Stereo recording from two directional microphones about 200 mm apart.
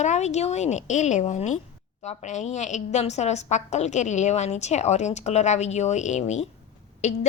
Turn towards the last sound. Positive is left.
turn(degrees=35)  # may be behind; listen again after turning